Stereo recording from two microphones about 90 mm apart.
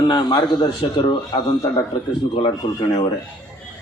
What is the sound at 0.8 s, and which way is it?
Speech, 70° left (ahead or behind).